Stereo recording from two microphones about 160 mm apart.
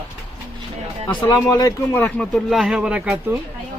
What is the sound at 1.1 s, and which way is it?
Speech, 25° left (ahead or behind).